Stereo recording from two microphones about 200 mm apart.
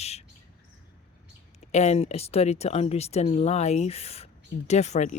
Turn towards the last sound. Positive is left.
turn(degrees=35)  # may be behind; listen again after turning